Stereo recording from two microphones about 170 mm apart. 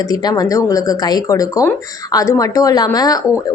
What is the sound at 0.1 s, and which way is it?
A woman's voice, 25° left (ahead or behind).